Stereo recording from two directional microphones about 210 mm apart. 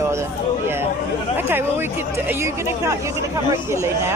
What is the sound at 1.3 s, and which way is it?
Speech, 10° right (ahead or behind).